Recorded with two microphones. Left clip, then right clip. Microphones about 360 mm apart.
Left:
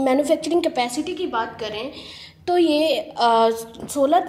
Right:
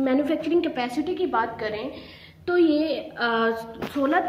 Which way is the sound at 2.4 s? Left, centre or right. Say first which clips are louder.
Left 3 dB; centre.